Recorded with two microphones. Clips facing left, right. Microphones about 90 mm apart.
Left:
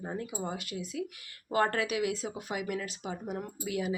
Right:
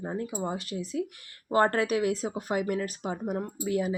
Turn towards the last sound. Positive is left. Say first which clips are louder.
# right 5 dB
turn(degrees=-35)  # may be behind; listen again after turning